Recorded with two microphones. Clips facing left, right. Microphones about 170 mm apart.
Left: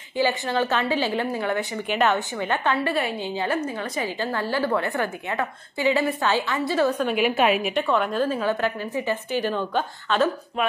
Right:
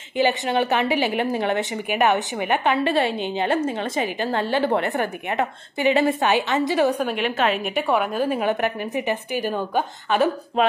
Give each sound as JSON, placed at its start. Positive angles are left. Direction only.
{"t": 0.2, "sound": "a woman's voice", "side_deg": -20}
{"t": 7.1, "sound": "a woman's voice", "side_deg": 10}
{"t": 7.9, "sound": "a woman's voice", "side_deg": -10}
{"t": 10.6, "sound": "speech", "side_deg": -30}